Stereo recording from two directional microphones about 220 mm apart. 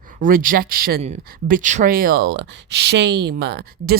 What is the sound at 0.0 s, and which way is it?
Speech, 40° right (ahead or behind).